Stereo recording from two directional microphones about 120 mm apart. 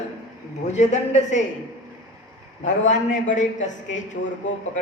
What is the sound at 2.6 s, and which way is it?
Speech, 90° left.